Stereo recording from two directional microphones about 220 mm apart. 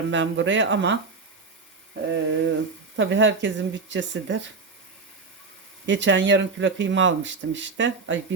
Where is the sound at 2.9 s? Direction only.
55° right (ahead or behind).